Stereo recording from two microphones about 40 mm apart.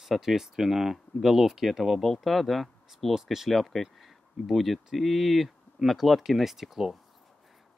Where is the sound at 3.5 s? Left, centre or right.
Centre.